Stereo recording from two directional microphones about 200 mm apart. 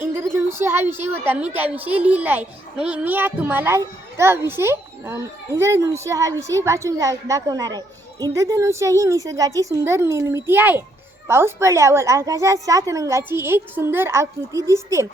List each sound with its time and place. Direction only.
0.0 s a woman's voice: 10° right (ahead or behind)